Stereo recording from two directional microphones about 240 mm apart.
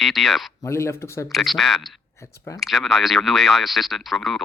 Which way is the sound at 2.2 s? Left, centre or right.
Centre.